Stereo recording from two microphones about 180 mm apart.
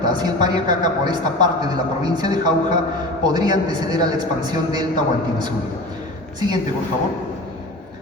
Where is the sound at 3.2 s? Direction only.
25° right (ahead or behind).